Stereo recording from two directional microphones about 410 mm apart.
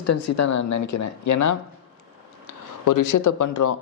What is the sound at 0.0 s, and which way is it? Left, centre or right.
Speech, left.